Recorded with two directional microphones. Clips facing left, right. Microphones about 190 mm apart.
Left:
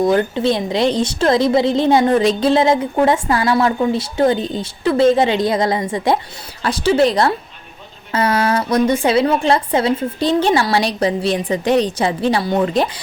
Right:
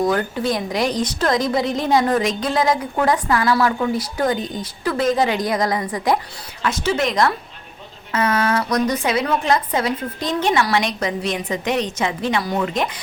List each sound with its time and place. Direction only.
0.0 s a woman's voice: 25° left (ahead or behind)